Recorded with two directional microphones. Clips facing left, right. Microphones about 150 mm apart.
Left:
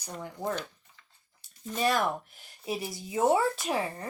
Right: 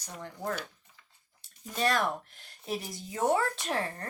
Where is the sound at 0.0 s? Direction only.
10° left (ahead or behind).